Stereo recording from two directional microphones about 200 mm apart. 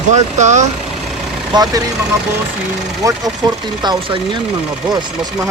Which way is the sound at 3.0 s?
15° right (ahead or behind).